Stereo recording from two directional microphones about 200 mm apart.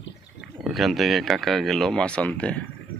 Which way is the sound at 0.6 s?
Centre (ahead or behind).